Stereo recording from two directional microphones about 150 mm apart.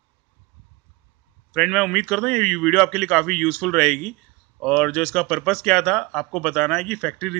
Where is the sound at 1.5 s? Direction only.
Centre (ahead or behind).